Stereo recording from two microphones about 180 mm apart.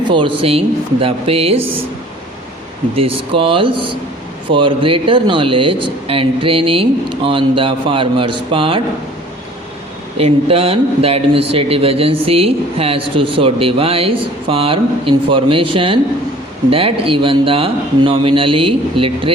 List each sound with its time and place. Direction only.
0.1 s a man's voice: 25° right (ahead or behind)
2.9 s speech: 30° right (ahead or behind)
10.2 s a man's voice: 35° right (ahead or behind)